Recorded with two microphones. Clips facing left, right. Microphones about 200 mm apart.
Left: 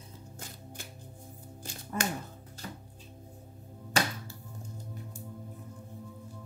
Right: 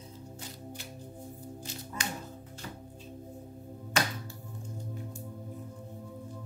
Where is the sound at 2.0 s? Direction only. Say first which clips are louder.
Left 5 dB; 50° left (ahead or behind).